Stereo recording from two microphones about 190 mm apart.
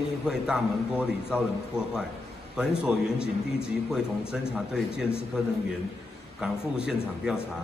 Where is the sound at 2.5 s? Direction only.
5° right (ahead or behind).